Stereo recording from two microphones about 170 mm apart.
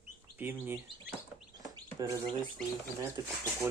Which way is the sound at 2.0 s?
20° right (ahead or behind).